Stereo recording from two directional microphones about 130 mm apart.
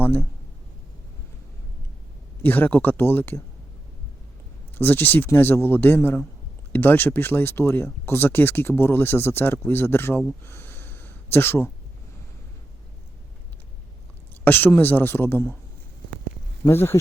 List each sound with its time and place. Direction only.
0.0 s speech: 15° left (ahead or behind)
2.4 s speech: 15° left (ahead or behind)
4.7 s speech: 15° left (ahead or behind)
10.2 s a sound: 20° left (ahead or behind)
14.4 s speech: 15° left (ahead or behind)
16.6 s speech: 20° left (ahead or behind)